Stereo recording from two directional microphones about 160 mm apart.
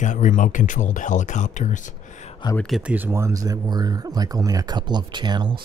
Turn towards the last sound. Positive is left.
turn(degrees=-30)  # may be behind; listen again after turning